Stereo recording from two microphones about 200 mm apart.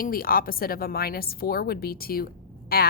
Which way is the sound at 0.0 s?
45° left (ahead or behind).